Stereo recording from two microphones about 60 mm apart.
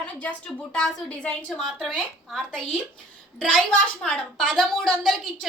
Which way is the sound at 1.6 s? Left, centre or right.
Centre.